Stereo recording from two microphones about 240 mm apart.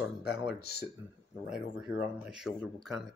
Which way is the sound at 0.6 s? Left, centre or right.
Left.